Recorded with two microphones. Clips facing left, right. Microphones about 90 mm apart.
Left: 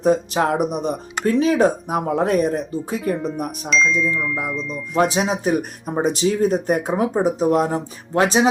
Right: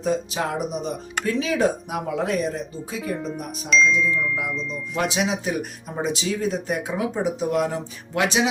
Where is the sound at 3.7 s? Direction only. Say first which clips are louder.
Even; centre (ahead or behind).